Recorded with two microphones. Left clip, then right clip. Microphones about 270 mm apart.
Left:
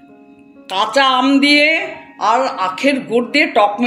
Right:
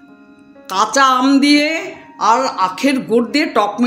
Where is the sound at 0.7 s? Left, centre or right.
Right.